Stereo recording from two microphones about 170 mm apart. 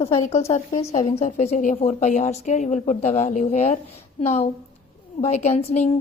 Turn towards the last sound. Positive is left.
turn(degrees=40)  # may be behind; listen again after turning